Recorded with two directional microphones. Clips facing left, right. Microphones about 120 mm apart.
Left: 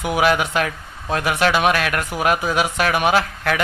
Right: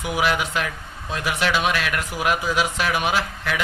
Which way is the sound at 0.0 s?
55° left (ahead or behind).